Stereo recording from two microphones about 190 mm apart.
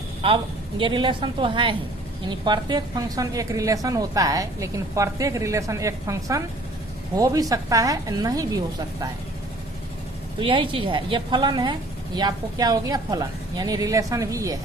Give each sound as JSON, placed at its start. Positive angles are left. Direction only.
{"t": 0.2, "sound": "a woman's voice", "side_deg": -30}
{"t": 10.4, "sound": "a woman's voice", "side_deg": -25}